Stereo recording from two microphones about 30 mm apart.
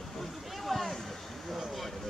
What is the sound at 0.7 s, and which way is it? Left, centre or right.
Speech, centre.